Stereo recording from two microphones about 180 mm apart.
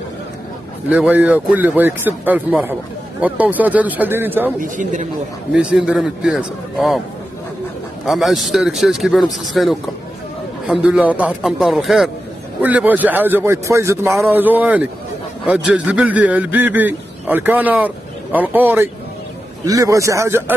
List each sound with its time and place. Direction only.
0.8 s a man's voice: 10° right (ahead or behind)
4.6 s speech: 45° right (ahead or behind)
5.5 s a man's voice: 5° right (ahead or behind)
8.0 s a man's voice: centre (ahead or behind)